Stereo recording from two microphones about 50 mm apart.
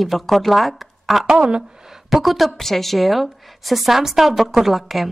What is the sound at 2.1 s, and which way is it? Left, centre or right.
A woman's voice, centre.